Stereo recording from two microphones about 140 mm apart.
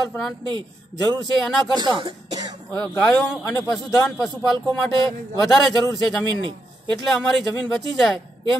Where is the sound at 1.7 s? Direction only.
30° right (ahead or behind).